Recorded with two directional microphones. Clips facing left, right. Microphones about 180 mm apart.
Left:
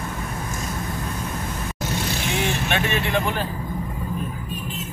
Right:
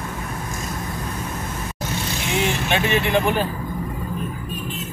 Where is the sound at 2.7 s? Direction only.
20° right (ahead or behind).